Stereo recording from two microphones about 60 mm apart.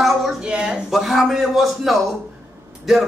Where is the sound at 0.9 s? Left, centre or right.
Centre.